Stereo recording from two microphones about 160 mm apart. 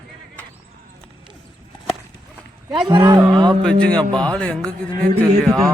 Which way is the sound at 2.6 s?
30° right (ahead or behind).